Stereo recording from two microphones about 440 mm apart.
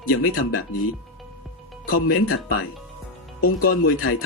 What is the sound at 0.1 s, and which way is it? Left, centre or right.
Speech, left.